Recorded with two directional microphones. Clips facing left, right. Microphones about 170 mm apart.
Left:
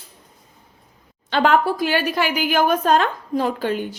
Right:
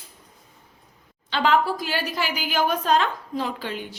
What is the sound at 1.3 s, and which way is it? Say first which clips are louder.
A woman's voice: left 4 dB; 50° left (ahead or behind).